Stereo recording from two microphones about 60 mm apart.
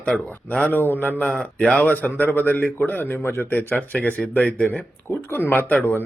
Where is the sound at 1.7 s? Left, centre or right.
Left.